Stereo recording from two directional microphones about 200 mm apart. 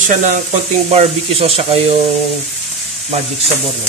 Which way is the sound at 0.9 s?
30° right (ahead or behind).